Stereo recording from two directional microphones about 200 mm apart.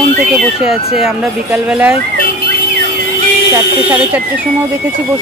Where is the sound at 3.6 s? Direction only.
10° right (ahead or behind).